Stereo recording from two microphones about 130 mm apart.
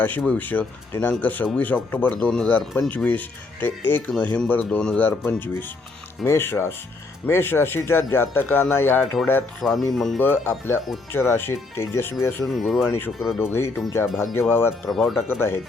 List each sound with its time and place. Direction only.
0.0 s speech: 15° left (ahead or behind)
9.6 s speech: centre (ahead or behind)
10.2 s speech: 15° left (ahead or behind)
12.5 s speech: centre (ahead or behind)
13.4 s speech: 20° left (ahead or behind)
14.8 s speech: centre (ahead or behind)
15.3 s speech: 15° left (ahead or behind)